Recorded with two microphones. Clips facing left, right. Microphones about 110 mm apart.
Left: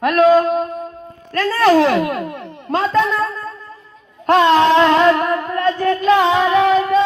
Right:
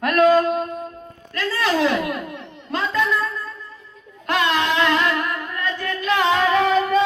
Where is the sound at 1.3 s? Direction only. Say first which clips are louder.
Left 9 dB; 45° left (ahead or behind).